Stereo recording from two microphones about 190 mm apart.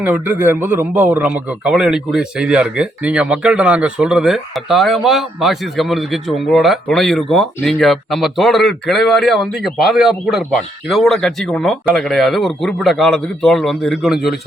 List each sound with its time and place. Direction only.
0.0 s a man's voice: 10° right (ahead or behind)